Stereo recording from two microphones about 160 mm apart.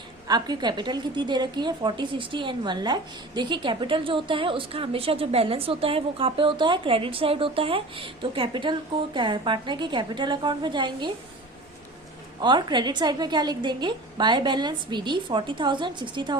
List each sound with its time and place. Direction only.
0.3 s a woman's voice: 25° right (ahead or behind)
12.4 s a woman's voice: 30° right (ahead or behind)